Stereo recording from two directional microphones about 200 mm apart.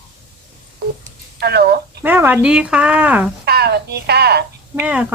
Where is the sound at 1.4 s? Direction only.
55° right (ahead or behind).